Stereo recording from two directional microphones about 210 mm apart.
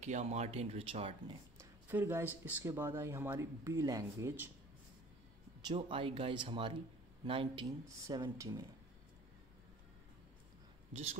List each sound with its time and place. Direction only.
0.0 s speech: 35° right (ahead or behind)
1.6 s speech: 10° right (ahead or behind)
5.7 s speech: 25° right (ahead or behind)
10.9 s a man's voice: 30° right (ahead or behind)